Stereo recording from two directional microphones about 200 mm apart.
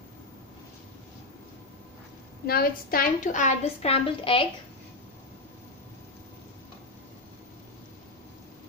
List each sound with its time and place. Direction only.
2.4 s a woman's voice: 50° left (ahead or behind); by 4.5 s 25° left (ahead or behind)